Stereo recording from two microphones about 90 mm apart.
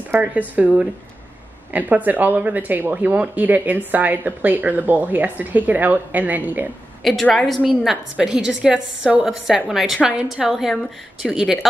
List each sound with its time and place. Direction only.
0.1 s speech: 15° right (ahead or behind)
7.0 s a woman's voice: centre (ahead or behind)